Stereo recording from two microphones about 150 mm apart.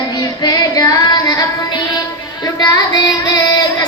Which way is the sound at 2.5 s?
25° left (ahead or behind).